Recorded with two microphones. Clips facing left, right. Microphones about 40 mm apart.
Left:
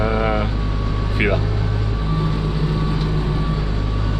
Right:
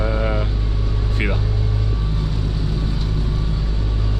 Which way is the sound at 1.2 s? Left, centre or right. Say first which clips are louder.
Left 5 dB; centre.